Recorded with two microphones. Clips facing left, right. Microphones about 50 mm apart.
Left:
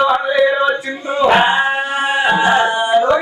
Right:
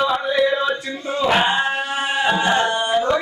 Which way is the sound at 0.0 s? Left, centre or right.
Centre.